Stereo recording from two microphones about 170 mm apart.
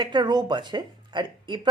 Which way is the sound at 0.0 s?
25° right (ahead or behind).